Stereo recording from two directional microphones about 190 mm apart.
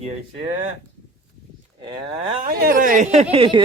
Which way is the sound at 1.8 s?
25° right (ahead or behind).